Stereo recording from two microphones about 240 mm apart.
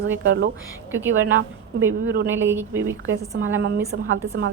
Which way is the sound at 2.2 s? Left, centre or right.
Centre.